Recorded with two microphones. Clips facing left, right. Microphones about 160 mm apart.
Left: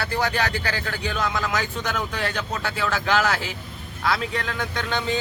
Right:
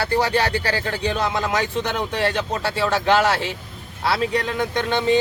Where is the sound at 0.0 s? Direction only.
35° right (ahead or behind).